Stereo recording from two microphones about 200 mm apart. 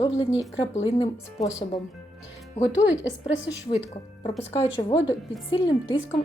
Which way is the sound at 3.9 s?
30° left (ahead or behind).